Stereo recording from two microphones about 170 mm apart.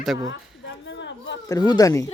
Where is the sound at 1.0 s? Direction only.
90° left.